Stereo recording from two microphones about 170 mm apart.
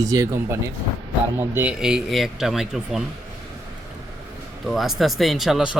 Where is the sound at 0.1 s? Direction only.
15° right (ahead or behind).